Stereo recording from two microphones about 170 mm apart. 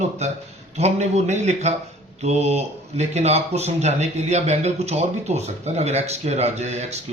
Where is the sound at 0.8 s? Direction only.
40° right (ahead or behind).